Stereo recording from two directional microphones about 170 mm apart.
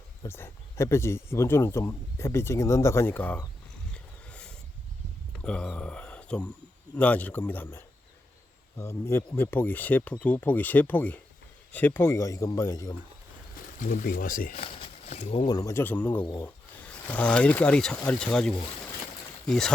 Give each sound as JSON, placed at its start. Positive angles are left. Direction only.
{"t": 0.2, "sound": "speech", "side_deg": 15}
{"t": 3.9, "sound": "a sound", "side_deg": 5}
{"t": 5.4, "sound": "speech", "side_deg": 5}
{"t": 13.7, "sound": "speech", "side_deg": 50}
{"t": 14.5, "sound": "speech", "side_deg": 35}